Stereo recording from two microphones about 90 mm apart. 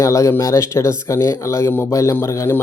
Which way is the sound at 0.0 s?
35° left (ahead or behind).